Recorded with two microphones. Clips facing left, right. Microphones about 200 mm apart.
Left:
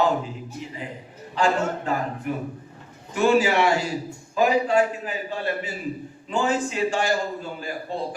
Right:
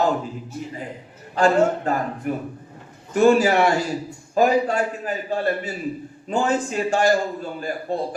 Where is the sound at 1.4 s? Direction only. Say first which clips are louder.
Right 5 dB; 45° right (ahead or behind).